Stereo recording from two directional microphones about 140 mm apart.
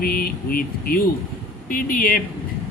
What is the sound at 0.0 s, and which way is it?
Speech, 90° left.